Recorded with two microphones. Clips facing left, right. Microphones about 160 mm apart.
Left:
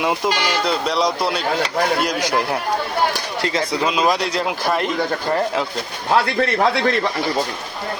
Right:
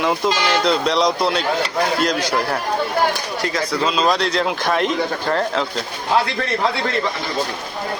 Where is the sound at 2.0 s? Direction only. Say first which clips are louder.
Even; 15° left (ahead or behind).